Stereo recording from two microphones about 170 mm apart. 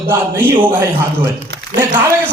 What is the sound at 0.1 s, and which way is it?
A man's voice, 10° right (ahead or behind).